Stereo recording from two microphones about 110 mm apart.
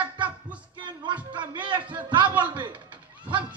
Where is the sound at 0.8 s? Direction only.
45° right (ahead or behind).